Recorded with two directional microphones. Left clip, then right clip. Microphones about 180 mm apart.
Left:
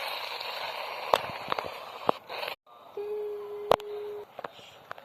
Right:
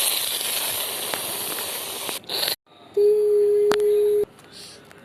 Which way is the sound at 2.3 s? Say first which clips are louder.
Right 10 dB; 20° right (ahead or behind).